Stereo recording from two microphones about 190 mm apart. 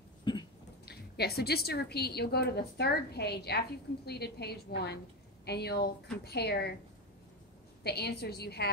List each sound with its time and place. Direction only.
0.2 s a sound: 25° left (ahead or behind)
0.8 s a woman's voice: 55° left (ahead or behind)
7.8 s a woman's voice: 60° left (ahead or behind)